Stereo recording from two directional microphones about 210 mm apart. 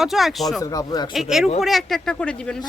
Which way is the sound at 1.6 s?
Centre (ahead or behind).